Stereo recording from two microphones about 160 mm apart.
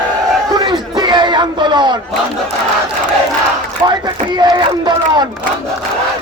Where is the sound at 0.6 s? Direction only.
25° right (ahead or behind).